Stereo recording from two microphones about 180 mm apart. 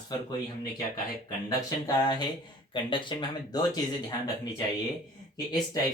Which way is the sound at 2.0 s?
25° left (ahead or behind).